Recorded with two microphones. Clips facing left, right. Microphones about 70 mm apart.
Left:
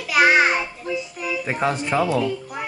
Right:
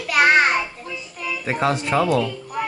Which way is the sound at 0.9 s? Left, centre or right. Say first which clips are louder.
Left 3 dB; centre.